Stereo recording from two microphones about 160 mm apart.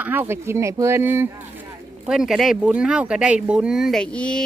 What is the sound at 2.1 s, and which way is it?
Speech, 5° right (ahead or behind).